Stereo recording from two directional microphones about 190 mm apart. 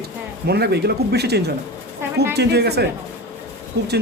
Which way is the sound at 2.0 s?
15° right (ahead or behind).